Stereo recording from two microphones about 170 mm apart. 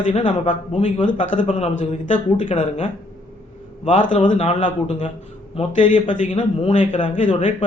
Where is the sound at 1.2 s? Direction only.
45° left (ahead or behind).